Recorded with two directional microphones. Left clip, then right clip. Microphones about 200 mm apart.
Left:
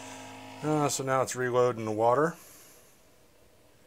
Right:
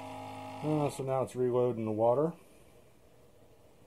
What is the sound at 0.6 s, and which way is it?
Speech, 40° left (ahead or behind).